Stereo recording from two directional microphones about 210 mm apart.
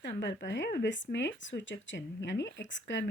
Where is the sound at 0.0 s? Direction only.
55° left (ahead or behind).